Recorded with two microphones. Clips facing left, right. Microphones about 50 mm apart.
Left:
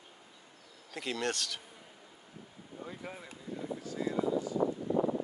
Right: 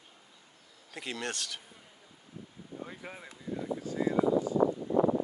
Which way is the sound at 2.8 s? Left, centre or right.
Centre.